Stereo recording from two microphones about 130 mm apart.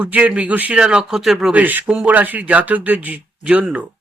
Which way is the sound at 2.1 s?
15° right (ahead or behind).